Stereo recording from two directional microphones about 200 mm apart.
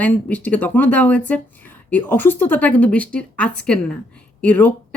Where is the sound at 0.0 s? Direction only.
5° left (ahead or behind).